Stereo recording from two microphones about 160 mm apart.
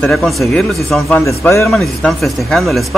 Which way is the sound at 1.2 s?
15° left (ahead or behind).